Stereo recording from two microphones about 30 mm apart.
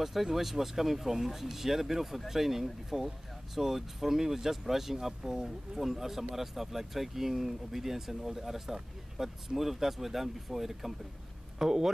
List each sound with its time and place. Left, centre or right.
0.0 s speech: centre
9.6 s speech: centre
11.5 s speech: centre